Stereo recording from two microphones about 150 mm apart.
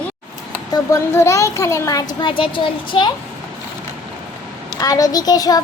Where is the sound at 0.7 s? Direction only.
20° left (ahead or behind).